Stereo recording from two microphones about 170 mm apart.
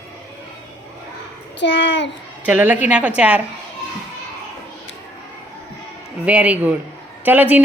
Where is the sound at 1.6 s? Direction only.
90° left.